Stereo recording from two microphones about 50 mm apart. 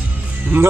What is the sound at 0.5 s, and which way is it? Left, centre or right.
Speech, right.